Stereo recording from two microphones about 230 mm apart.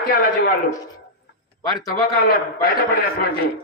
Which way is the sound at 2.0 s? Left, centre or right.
Left.